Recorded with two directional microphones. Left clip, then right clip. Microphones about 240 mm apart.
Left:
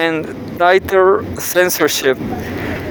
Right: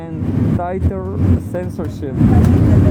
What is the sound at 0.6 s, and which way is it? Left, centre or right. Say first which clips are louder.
Speech: left 12 dB; left.